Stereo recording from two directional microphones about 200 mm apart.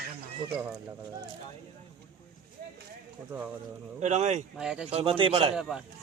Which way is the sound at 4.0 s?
35° right (ahead or behind).